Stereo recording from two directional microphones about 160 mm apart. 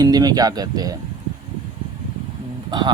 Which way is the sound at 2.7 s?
30° right (ahead or behind).